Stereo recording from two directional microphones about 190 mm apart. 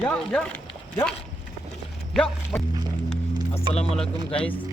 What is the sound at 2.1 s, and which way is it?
Speech, 5° left (ahead or behind).